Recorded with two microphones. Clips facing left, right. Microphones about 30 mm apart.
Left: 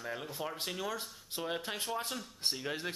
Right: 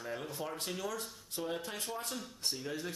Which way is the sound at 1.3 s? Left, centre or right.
Left.